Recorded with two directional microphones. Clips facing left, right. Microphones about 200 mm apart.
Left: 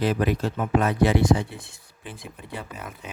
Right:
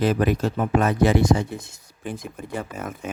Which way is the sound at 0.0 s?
45° right (ahead or behind).